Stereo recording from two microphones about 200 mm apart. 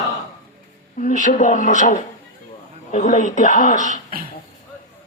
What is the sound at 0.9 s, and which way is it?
Speech, 40° left (ahead or behind).